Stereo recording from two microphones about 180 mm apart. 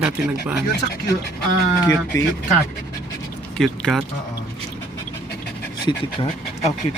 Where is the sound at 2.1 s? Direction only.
20° left (ahead or behind).